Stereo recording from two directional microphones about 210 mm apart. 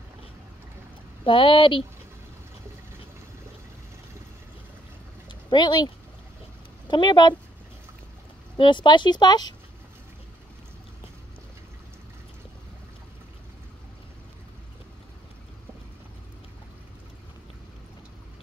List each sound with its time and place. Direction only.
1.2 s speech: 25° left (ahead or behind)
5.3 s a sound: 20° left (ahead or behind)
6.9 s speech: 20° left (ahead or behind)
8.5 s speech: 20° left (ahead or behind)